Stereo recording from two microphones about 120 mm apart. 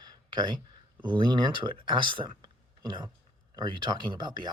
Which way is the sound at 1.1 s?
40° right (ahead or behind).